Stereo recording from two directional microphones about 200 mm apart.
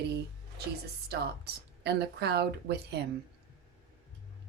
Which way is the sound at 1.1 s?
55° right (ahead or behind).